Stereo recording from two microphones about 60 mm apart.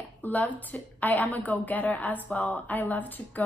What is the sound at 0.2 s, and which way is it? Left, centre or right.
A woman's voice, left.